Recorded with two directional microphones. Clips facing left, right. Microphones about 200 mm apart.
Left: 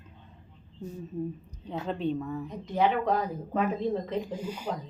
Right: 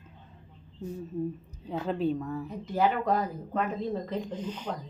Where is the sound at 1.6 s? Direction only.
5° right (ahead or behind).